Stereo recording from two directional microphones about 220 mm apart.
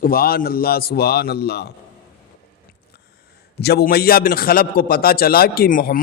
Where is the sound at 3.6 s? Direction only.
45° left (ahead or behind).